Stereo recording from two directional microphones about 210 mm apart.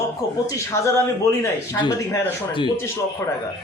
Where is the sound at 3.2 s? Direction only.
15° left (ahead or behind).